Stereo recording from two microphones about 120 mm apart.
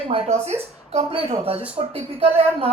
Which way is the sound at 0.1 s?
50° right (ahead or behind).